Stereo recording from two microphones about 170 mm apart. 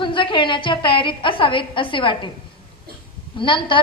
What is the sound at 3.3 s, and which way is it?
Speech, 30° left (ahead or behind).